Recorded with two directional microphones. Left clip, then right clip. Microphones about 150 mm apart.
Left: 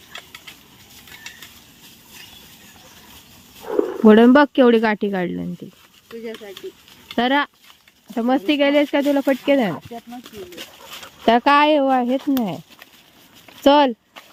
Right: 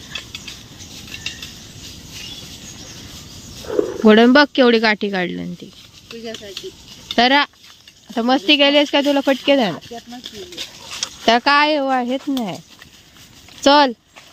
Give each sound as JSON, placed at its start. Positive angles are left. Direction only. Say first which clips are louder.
{"t": 3.7, "sound": "speech", "louder": "right 1 dB", "side_deg": 5}
{"t": 6.1, "sound": "speech", "louder": "right 1 dB", "side_deg": -15}
{"t": 7.2, "sound": "speech", "louder": "right 5 dB", "side_deg": 0}
{"t": 11.0, "sound": "speech", "louder": "right 1 dB", "side_deg": 15}
{"t": 12.4, "sound": "speech", "louder": "even", "side_deg": 5}